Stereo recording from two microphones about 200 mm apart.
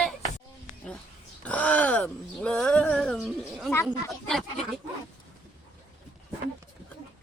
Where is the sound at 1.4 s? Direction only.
5° left (ahead or behind).